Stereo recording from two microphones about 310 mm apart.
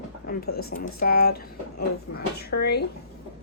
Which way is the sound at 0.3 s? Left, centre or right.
Left.